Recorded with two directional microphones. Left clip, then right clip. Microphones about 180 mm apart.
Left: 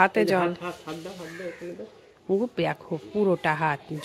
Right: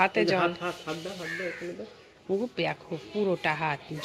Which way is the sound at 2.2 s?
35° left (ahead or behind).